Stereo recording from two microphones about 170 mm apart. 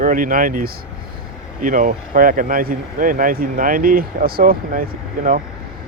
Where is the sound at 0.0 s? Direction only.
55° right (ahead or behind).